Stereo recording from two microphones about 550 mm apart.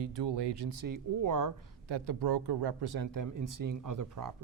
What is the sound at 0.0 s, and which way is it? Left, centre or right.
Speech, right.